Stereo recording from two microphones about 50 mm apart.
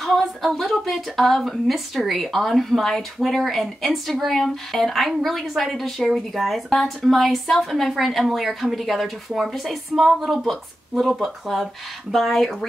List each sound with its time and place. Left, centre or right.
0.0 s a woman's voice: centre